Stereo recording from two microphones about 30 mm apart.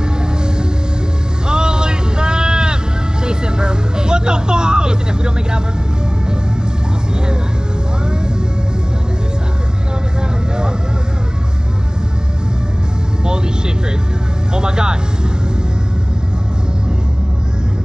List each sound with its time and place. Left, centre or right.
1.5 s bleat: right
3.3 s vehicle: right
14.5 s music: right